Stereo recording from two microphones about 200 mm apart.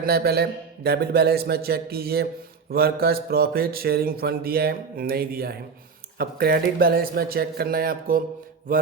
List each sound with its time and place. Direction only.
0.0 s speech: 50° right (ahead or behind)